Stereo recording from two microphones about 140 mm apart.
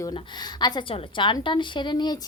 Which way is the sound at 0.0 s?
30° left (ahead or behind).